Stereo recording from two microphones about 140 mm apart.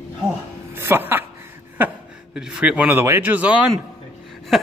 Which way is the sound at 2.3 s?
5° right (ahead or behind).